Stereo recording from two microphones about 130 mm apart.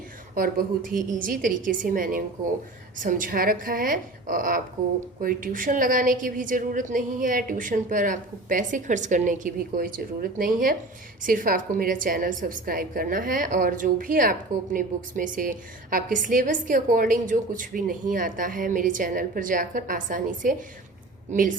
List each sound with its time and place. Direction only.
0.3 s a woman's voice: 90° right